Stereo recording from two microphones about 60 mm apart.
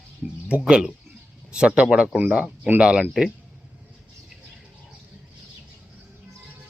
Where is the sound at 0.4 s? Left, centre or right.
Centre.